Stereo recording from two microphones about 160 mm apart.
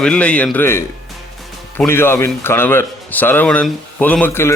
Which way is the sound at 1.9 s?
15° left (ahead or behind).